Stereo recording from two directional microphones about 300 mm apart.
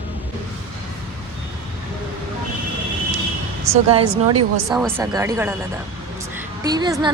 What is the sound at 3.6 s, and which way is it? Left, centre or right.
Speech, centre.